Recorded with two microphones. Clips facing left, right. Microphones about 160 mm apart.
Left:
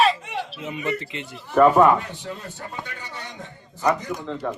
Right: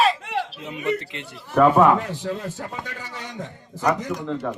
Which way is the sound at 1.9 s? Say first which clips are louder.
Right 5 dB; 90° right.